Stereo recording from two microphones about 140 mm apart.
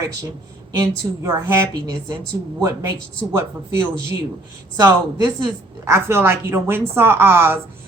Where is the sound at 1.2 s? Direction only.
15° right (ahead or behind).